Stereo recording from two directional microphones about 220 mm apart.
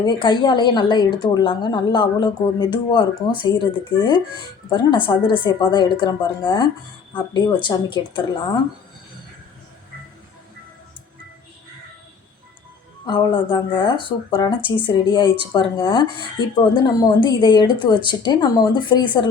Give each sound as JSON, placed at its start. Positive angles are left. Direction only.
{"t": 0.1, "sound": "a woman's voice", "side_deg": 20}
{"t": 13.1, "sound": "a woman's voice", "side_deg": 20}